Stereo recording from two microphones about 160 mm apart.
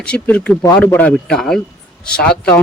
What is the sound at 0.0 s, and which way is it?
A woman's voice, 10° left (ahead or behind).